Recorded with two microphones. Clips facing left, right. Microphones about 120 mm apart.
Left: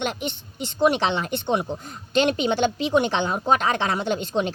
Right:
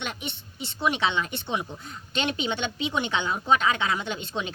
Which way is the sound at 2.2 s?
40° left (ahead or behind).